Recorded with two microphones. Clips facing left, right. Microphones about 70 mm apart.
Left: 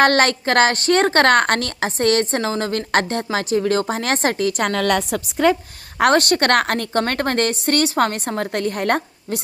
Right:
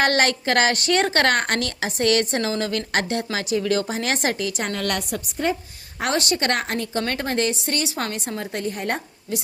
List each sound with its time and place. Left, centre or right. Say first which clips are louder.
0.0 s a woman's voice: left 4 dB; left
5.2 s a woman's voice: left 8 dB; left
6.0 s a woman's voice: left 8 dB; left